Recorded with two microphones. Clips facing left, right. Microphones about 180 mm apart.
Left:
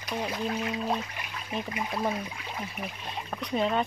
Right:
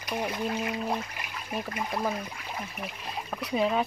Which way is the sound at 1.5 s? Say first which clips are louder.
Even; centre (ahead or behind).